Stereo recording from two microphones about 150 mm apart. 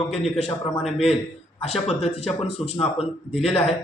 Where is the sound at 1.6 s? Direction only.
40° left (ahead or behind).